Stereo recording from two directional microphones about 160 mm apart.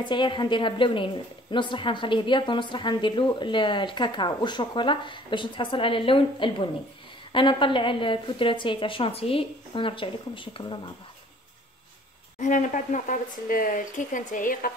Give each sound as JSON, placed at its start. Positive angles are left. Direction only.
{"t": 0.0, "sound": "a woman's voice", "side_deg": 30}
{"t": 12.4, "sound": "speech", "side_deg": 55}